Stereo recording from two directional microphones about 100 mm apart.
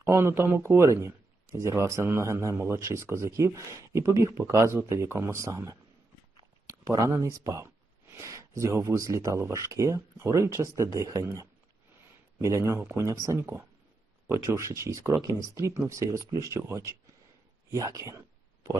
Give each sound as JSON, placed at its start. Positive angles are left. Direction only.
{"t": 0.0, "sound": "speech", "side_deg": -25}
{"t": 6.8, "sound": "speech", "side_deg": -35}